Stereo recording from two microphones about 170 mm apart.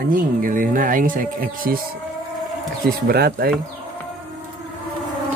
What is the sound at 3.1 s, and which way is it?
Speech, 65° right (ahead or behind).